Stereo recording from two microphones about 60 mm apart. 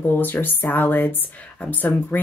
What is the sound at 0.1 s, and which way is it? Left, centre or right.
Speech, left.